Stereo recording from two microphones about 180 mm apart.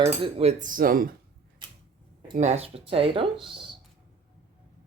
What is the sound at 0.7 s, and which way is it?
Speech, 50° right (ahead or behind).